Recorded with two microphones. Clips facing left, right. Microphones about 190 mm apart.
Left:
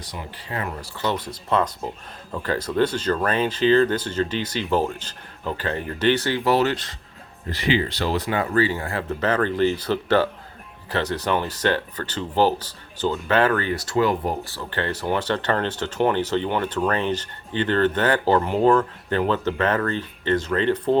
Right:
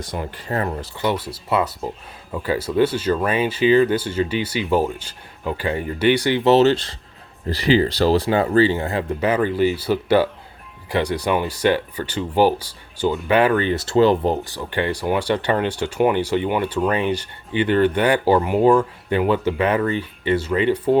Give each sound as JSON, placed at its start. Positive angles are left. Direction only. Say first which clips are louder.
{"t": 0.0, "sound": "speech", "louder": "right 7 dB", "side_deg": -50}
{"t": 0.8, "sound": "speech", "louder": "right 3 dB", "side_deg": -15}